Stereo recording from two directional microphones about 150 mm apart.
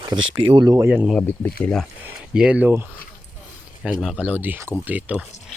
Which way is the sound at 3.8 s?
Centre (ahead or behind).